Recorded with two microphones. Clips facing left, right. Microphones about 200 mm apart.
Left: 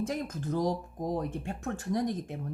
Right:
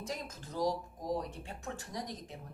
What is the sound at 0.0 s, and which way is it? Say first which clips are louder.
Speech: left 9 dB; 55° left (ahead or behind).